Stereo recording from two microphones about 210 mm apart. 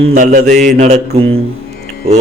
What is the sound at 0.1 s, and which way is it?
Mantra, 35° right (ahead or behind).